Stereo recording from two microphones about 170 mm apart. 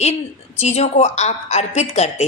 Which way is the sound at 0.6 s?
40° left (ahead or behind).